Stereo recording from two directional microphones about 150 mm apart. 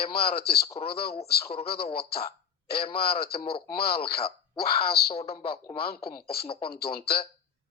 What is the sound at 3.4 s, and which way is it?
Speech, 40° left (ahead or behind).